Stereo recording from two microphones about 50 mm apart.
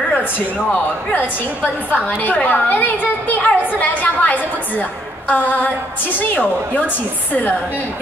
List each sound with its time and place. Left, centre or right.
1.1 s a woman's voice: left